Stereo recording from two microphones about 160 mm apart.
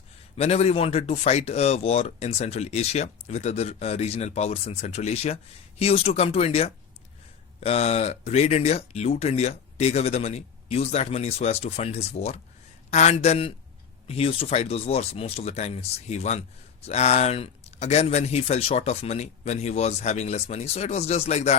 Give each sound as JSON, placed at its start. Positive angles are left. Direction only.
{"t": 0.3, "sound": "speech", "side_deg": 40}